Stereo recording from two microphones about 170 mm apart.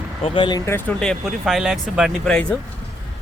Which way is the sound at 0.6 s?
10° left (ahead or behind).